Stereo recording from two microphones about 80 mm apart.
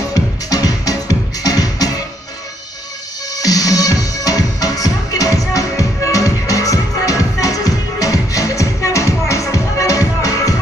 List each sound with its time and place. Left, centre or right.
0.1 s music: left
3.3 s music: left